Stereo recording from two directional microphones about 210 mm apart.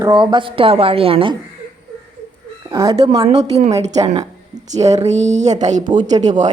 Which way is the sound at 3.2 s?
30° right (ahead or behind).